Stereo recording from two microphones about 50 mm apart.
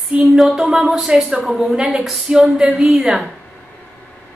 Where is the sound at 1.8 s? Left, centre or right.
Centre.